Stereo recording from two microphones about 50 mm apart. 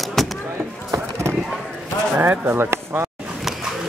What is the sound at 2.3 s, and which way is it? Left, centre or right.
Speech, right.